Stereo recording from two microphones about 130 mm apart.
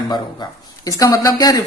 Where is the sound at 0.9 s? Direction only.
25° left (ahead or behind).